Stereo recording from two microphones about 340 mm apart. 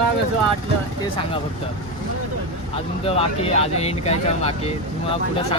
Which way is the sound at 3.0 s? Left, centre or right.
Centre.